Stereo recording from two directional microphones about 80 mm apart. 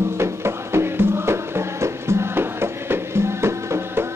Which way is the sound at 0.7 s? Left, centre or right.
Right.